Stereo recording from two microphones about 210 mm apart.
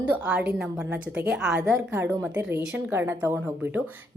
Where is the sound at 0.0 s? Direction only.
5° right (ahead or behind).